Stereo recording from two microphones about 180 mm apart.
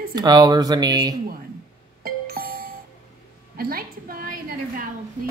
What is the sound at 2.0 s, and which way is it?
Music, 55° right (ahead or behind).